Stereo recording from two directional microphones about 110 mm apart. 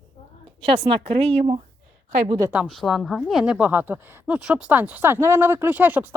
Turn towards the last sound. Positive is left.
turn(degrees=-15)  # may be behind; listen again after turning